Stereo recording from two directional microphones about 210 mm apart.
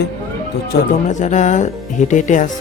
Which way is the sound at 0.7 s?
50° left (ahead or behind).